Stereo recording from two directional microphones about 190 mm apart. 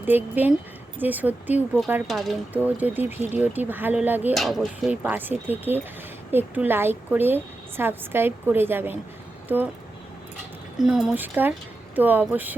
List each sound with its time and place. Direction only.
0.0 s a woman's voice: 10° right (ahead or behind)
2.0 s a woman's voice: centre (ahead or behind)
4.4 s a woman's voice: centre (ahead or behind)
10.8 s a woman's voice: 5° right (ahead or behind)